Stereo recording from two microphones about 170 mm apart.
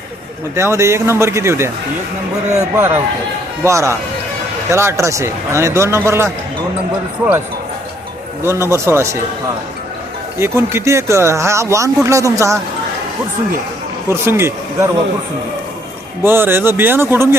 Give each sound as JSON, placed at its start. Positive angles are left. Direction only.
{"t": 0.5, "sound": "speech", "side_deg": -15}
{"t": 2.7, "sound": "speech", "side_deg": -15}
{"t": 8.4, "sound": "speech", "side_deg": -15}
{"t": 10.3, "sound": "speech", "side_deg": -15}
{"t": 14.1, "sound": "speech", "side_deg": -15}
{"t": 16.2, "sound": "speech", "side_deg": -15}